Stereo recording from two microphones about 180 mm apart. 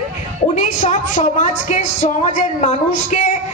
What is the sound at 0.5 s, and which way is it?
A woman's voice, 40° left (ahead or behind).